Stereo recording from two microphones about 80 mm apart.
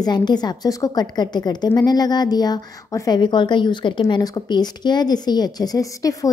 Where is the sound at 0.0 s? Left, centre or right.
Left.